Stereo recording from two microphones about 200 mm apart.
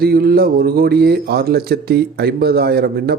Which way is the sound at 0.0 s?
50° right (ahead or behind).